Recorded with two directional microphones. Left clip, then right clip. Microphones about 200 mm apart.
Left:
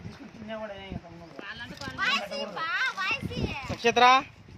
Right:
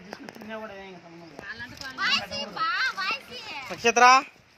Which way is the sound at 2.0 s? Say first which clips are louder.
Right 2 dB; 35° left (ahead or behind).